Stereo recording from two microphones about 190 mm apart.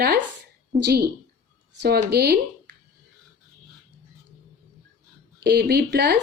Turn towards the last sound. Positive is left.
turn(degrees=-60)  # may be behind; listen again after turning